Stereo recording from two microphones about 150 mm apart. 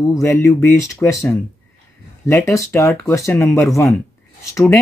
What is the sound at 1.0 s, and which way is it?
Speech, 15° left (ahead or behind).